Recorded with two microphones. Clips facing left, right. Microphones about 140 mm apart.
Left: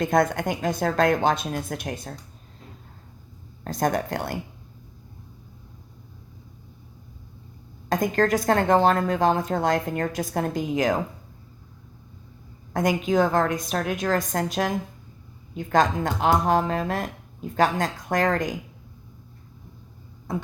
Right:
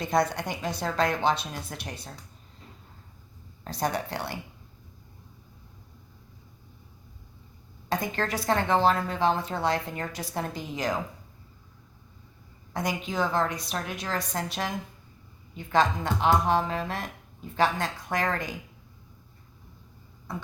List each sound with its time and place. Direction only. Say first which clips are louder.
0.0 s a woman's voice: left 4 dB; 50° left (ahead or behind)
3.6 s a woman's voice: left 5 dB; 50° left (ahead or behind)
7.9 s a woman's voice: left 8 dB; 45° left (ahead or behind)
12.7 s a woman's voice: left 8 dB; 50° left (ahead or behind)